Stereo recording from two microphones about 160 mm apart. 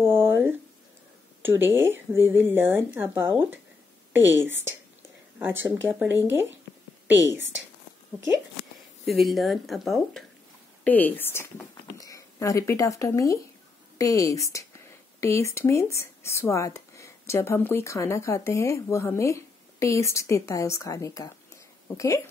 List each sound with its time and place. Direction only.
0.0 s a sound: 15° right (ahead or behind)
1.4 s speech: 15° right (ahead or behind)
9.0 s speech: centre (ahead or behind); by 22.2 s 20° left (ahead or behind)